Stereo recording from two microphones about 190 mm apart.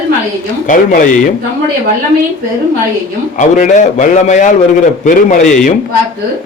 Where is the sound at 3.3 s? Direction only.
40° left (ahead or behind).